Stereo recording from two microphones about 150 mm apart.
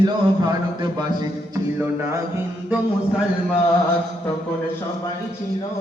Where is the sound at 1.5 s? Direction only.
15° right (ahead or behind).